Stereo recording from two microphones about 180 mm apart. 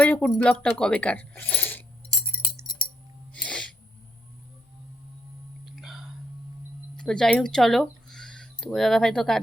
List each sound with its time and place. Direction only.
0.0 s speech: 5° left (ahead or behind)
2.6 s chink: 25° left (ahead or behind)
3.3 s sneeze: 5° left (ahead or behind)
5.7 s hiccup: centre (ahead or behind)
6.9 s speech: 5° left (ahead or behind)